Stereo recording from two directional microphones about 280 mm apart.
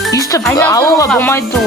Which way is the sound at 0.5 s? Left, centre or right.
Centre.